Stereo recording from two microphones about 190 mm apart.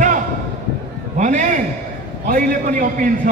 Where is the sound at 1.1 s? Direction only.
40° right (ahead or behind).